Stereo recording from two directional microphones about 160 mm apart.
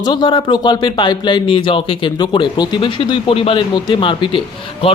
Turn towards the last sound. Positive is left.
turn(degrees=35)  # may be behind; listen again after turning